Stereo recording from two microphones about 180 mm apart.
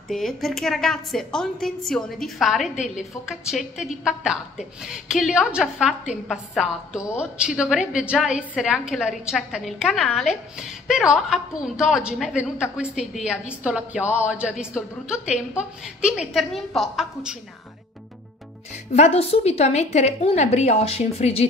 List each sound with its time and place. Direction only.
0.1 s a woman's voice: centre (ahead or behind)
18.9 s a woman's voice: 35° left (ahead or behind)